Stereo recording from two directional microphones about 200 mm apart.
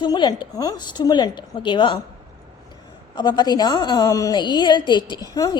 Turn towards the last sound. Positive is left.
turn(degrees=20)  # may be behind; listen again after turning